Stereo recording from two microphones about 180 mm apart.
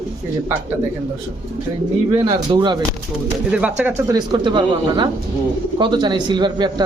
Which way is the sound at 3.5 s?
5° right (ahead or behind).